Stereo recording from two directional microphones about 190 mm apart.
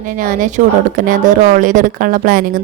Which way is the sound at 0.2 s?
45° right (ahead or behind).